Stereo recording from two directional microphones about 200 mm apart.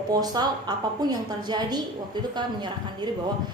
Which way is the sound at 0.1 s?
20° right (ahead or behind).